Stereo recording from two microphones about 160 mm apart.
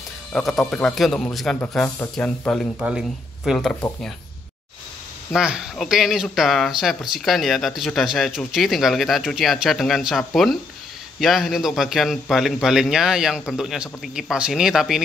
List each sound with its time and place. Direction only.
0.3 s a man's voice: centre (ahead or behind)
2.8 s speech: 5° right (ahead or behind)
5.3 s a man's voice: 5° right (ahead or behind)